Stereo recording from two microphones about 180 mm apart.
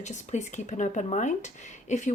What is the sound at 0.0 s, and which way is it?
A woman's voice, 40° left (ahead or behind).